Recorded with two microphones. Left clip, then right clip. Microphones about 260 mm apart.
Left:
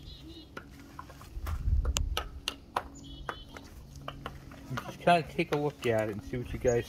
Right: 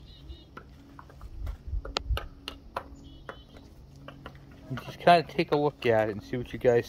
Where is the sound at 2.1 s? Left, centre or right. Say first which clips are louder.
Left 3 dB; centre.